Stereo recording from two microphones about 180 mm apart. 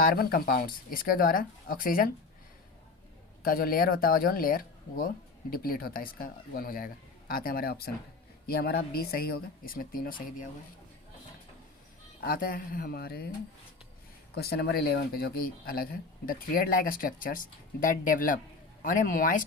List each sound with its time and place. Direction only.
0.0 s speech: 55° left (ahead or behind)
3.4 s speech: 55° left (ahead or behind)
12.2 s speech: 55° left (ahead or behind)
14.3 s speech: 65° left (ahead or behind); by 19.5 s 50° left (ahead or behind)